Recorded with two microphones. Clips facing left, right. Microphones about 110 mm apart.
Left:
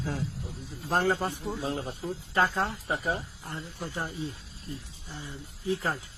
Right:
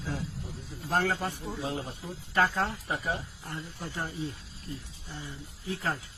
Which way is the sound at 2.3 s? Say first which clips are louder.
Even; 25° left (ahead or behind).